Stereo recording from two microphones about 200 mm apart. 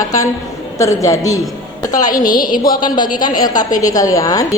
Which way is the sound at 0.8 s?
15° left (ahead or behind).